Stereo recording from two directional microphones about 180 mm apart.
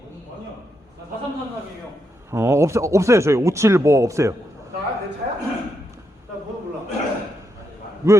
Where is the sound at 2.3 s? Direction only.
15° right (ahead or behind).